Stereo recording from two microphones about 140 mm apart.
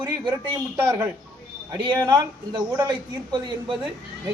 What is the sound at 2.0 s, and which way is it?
A man's voice, 30° right (ahead or behind).